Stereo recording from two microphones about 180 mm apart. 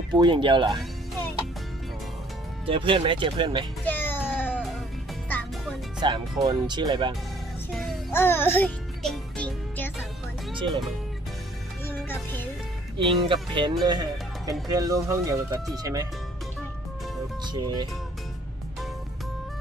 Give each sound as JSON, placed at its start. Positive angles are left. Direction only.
{"t": 0.1, "sound": "speech", "side_deg": -25}
{"t": 2.6, "sound": "speech", "side_deg": -30}
{"t": 3.8, "sound": "music", "side_deg": 10}
{"t": 5.9, "sound": "speech", "side_deg": -25}
{"t": 8.1, "sound": "music", "side_deg": 10}
{"t": 11.9, "sound": "music", "side_deg": 10}
{"t": 12.9, "sound": "speech", "side_deg": -25}
{"t": 17.5, "sound": "speech", "side_deg": -25}